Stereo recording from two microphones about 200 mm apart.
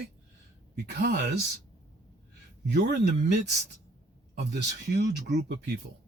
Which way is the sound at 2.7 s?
55° right (ahead or behind).